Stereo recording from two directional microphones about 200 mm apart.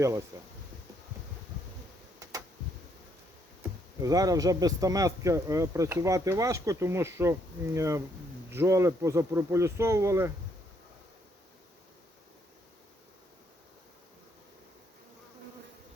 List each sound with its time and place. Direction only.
4.0 s speech: 20° right (ahead or behind)